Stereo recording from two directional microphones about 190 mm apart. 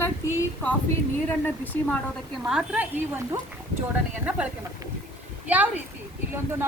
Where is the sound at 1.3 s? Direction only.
10° left (ahead or behind).